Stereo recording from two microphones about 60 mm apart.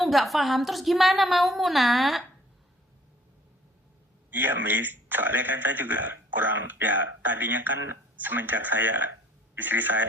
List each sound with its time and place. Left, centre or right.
0.0 s a woman's voice: centre
4.3 s speech: right